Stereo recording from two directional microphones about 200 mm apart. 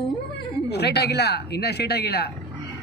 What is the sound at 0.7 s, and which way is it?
Speech, 55° left (ahead or behind).